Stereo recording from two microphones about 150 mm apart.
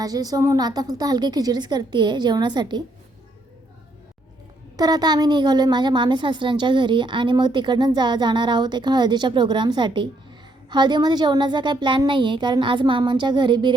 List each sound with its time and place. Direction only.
0.0 s a woman's voice: 25° right (ahead or behind)
4.8 s a woman's voice: 25° right (ahead or behind)